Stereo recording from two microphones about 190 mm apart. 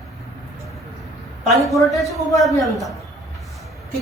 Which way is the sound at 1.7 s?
Centre (ahead or behind).